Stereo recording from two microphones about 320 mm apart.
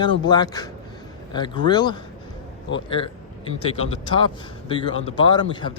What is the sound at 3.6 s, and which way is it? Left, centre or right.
Speech, centre.